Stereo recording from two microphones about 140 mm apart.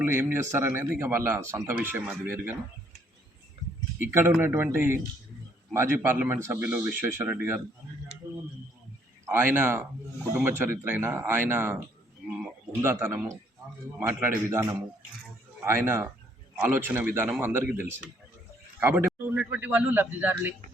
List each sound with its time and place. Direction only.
0.0 s speech: 15° right (ahead or behind)
4.1 s speech: 15° right (ahead or behind)
9.3 s speech: 15° right (ahead or behind)